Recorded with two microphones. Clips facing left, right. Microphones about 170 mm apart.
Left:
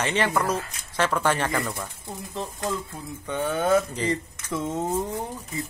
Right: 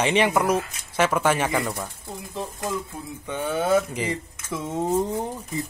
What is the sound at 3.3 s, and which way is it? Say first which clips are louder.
Speech: even; 5° right (ahead or behind).